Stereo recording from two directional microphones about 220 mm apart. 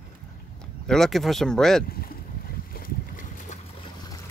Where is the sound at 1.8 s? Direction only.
40° left (ahead or behind).